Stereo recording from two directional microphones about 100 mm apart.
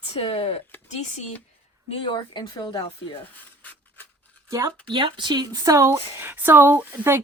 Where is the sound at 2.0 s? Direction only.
50° left (ahead or behind).